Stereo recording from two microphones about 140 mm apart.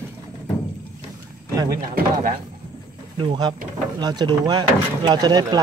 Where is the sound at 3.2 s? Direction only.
35° right (ahead or behind).